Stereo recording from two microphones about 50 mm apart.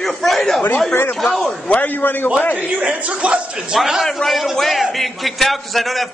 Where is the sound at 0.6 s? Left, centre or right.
Left.